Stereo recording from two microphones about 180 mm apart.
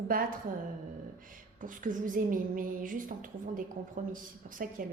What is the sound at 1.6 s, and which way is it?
A woman's voice, 45° right (ahead or behind).